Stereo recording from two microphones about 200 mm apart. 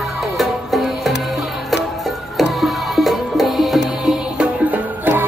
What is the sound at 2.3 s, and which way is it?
Music, centre (ahead or behind).